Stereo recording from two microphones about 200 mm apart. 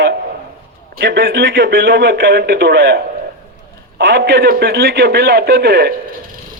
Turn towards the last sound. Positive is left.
turn(degrees=-55)  # may be behind; listen again after turning